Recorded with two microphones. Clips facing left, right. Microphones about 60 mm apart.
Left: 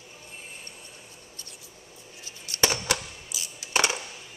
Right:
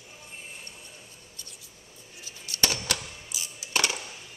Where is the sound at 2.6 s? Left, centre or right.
Left.